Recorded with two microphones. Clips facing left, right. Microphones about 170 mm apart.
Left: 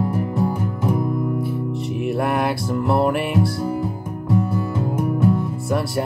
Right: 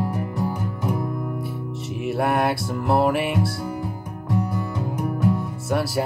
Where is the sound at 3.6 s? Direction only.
25° left (ahead or behind).